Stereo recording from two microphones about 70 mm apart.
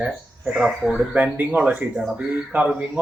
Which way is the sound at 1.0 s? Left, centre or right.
Centre.